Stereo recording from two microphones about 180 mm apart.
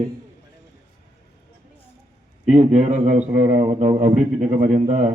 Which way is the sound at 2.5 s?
40° right (ahead or behind).